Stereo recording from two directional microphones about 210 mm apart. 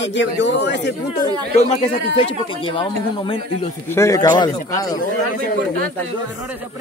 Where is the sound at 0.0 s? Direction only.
60° left (ahead or behind).